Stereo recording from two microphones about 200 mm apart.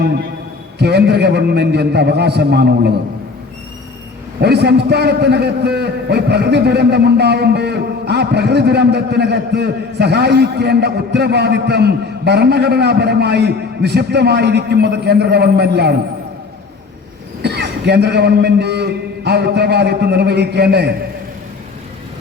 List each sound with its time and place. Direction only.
0.8 s a man's voice: 55° right (ahead or behind)
4.4 s a man's voice: 55° right (ahead or behind)
17.4 s a man's voice: 55° right (ahead or behind)